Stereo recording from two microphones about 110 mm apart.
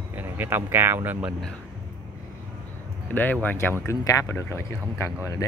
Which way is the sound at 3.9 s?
25° left (ahead or behind).